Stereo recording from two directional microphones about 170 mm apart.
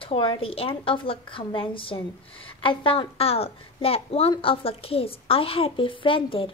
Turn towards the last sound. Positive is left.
turn(degrees=30)  # may be behind; listen again after turning